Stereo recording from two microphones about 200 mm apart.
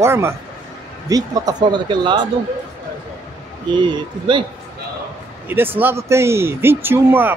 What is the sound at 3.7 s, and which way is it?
Speech, 25° right (ahead or behind).